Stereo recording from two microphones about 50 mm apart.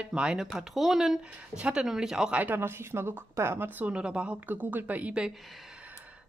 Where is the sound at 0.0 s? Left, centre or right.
Centre.